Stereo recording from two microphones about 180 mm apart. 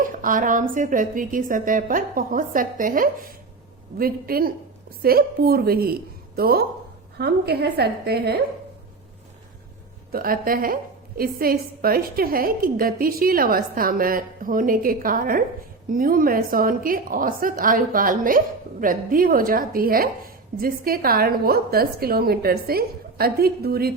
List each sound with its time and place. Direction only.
0.0 s a sound: 50° right (ahead or behind)
0.7 s a woman's voice: 45° right (ahead or behind)
10.1 s a woman's voice: 55° right (ahead or behind)